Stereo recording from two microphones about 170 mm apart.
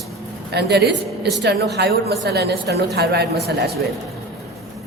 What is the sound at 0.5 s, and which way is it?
A woman's voice, 75° right (ahead or behind).